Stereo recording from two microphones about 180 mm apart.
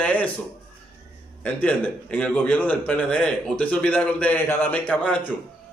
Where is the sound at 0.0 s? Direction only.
10° left (ahead or behind).